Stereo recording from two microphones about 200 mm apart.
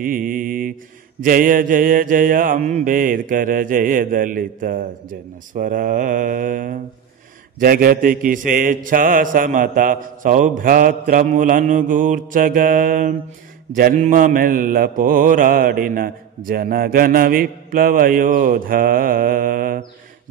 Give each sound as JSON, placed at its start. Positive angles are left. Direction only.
{"t": 0.0, "sound": "mantra", "side_deg": -45}
{"t": 5.5, "sound": "speech", "side_deg": -45}
{"t": 7.5, "sound": "mantra", "side_deg": -45}